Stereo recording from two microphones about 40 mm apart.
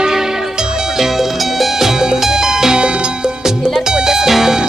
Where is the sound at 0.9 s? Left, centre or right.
Centre.